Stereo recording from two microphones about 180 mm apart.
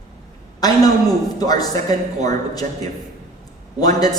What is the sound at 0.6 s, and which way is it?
A woman's voice, 20° left (ahead or behind).